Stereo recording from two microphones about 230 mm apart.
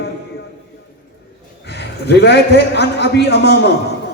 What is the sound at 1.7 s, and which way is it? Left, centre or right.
A man's voice, left.